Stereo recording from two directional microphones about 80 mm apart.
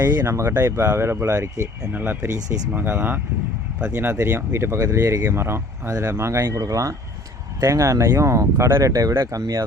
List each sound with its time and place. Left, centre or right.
0.3 s speech: right
1.4 s speech: right
1.9 s speech: right